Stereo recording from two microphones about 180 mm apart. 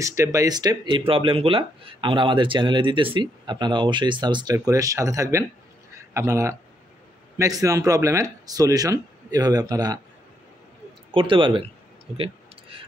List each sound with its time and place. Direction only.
0.0 s speech: 15° right (ahead or behind)
11.1 s speech: 30° right (ahead or behind)